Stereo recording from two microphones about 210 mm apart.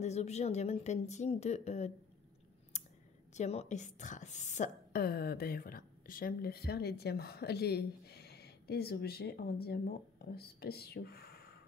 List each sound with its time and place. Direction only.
0.0 s speech: 30° left (ahead or behind)
3.3 s a woman's voice: 30° left (ahead or behind); by 11.5 s 50° left (ahead or behind)